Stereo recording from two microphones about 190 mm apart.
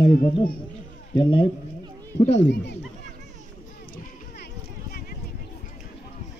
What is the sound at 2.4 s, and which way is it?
Speech, 65° left (ahead or behind).